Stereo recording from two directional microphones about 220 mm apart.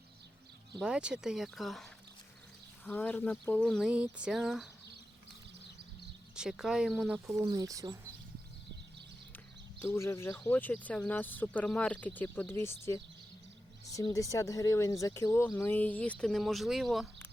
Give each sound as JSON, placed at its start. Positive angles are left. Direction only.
{"t": 0.8, "sound": "speech", "side_deg": -5}
{"t": 6.3, "sound": "speech", "side_deg": -5}
{"t": 7.4, "sound": "speech", "side_deg": -15}
{"t": 9.8, "sound": "speech", "side_deg": 10}